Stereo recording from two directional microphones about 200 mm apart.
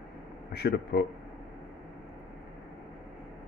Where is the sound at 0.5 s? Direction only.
55° left (ahead or behind).